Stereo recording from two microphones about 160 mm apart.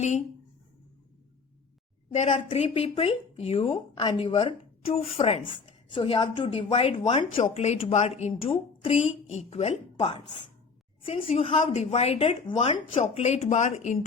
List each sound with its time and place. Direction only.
2.1 s speech: 45° left (ahead or behind)
7.4 s a woman's voice: 45° left (ahead or behind)